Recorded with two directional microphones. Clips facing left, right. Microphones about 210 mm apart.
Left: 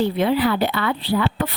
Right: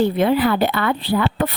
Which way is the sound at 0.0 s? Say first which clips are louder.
Right 2 dB; 50° right (ahead or behind).